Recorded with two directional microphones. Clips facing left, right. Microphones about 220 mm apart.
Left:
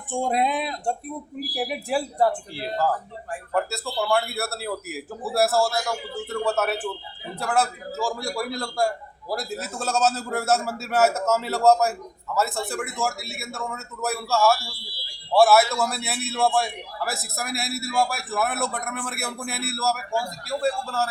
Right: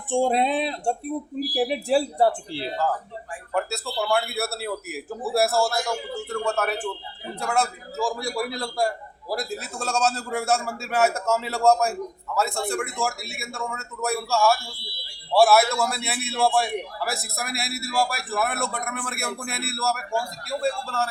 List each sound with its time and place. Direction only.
0.1 s speech: 30° right (ahead or behind)
3.5 s a man's voice: centre (ahead or behind)